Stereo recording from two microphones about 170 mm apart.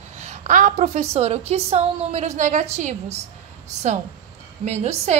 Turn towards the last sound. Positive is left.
turn(degrees=-40)  # may be behind; listen again after turning